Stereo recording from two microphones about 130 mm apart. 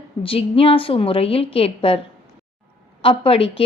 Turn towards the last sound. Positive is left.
turn(degrees=45)  # may be behind; listen again after turning